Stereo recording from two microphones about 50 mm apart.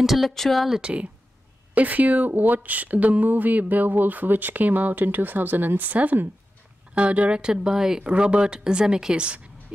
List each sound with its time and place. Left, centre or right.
0.0 s speech: centre
0.7 s a woman's voice: right
8.0 s a woman's voice: right